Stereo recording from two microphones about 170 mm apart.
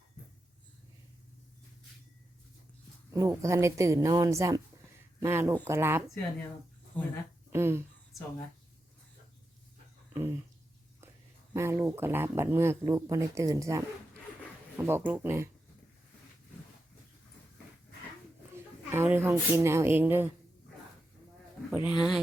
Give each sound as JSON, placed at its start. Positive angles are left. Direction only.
{"t": 3.1, "sound": "speech", "side_deg": -15}
{"t": 6.9, "sound": "speech", "side_deg": 10}
{"t": 7.5, "sound": "speech", "side_deg": -15}
{"t": 11.5, "sound": "speech", "side_deg": -15}
{"t": 18.9, "sound": "speech", "side_deg": -15}
{"t": 21.7, "sound": "speech", "side_deg": -10}